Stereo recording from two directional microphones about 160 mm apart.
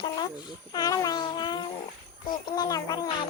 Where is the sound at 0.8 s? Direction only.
25° left (ahead or behind).